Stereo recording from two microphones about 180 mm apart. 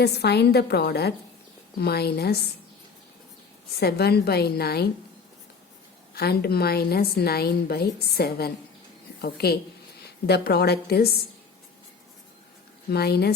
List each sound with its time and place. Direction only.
0.0 s a woman's voice: 65° left (ahead or behind)
3.8 s a woman's voice: 60° left (ahead or behind)
6.1 s a woman's voice: 60° left (ahead or behind)
12.9 s a woman's voice: 65° left (ahead or behind)